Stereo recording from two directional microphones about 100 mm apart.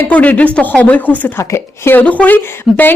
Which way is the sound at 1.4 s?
30° left (ahead or behind).